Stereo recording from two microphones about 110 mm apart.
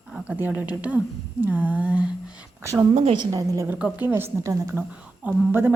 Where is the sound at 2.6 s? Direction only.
25° right (ahead or behind).